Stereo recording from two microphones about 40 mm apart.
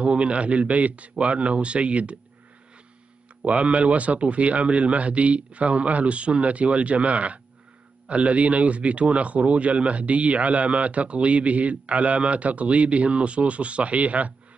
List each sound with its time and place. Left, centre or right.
0.0 s a man's voice: right
3.4 s a man's voice: right